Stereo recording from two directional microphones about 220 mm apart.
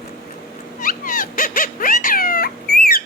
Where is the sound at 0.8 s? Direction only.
40° left (ahead or behind).